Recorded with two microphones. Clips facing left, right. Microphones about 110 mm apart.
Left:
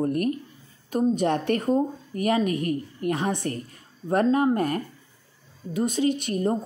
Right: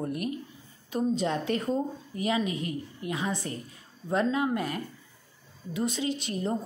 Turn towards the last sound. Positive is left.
turn(degrees=50)  # may be behind; listen again after turning